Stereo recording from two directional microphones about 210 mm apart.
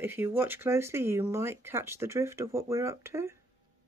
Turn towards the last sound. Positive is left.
turn(degrees=-15)  # may be behind; listen again after turning